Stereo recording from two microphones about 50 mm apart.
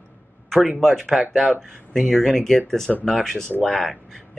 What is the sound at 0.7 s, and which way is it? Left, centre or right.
Speech, centre.